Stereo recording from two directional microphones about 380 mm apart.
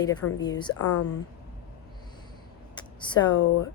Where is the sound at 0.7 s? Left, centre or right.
Left.